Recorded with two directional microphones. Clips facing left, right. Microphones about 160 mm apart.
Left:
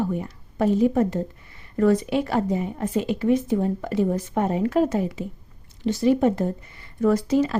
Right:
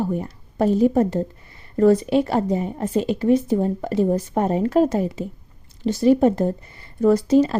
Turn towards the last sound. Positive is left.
turn(degrees=-30)  # may be behind; listen again after turning